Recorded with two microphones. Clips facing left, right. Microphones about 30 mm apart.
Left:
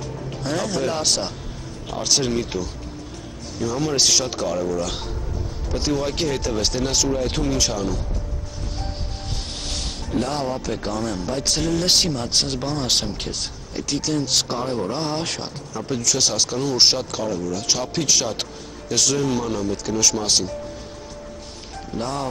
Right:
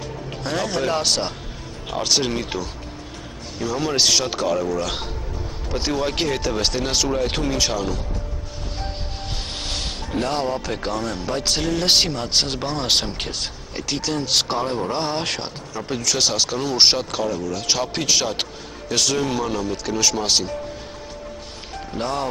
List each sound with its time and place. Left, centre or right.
0.4 s speech: centre
9.7 s speech: centre
21.9 s speech: centre